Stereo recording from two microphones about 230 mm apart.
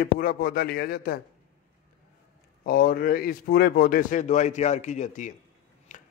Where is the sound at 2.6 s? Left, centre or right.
Left.